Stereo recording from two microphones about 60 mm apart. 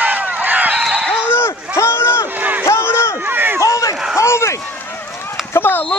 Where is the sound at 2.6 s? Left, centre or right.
Left.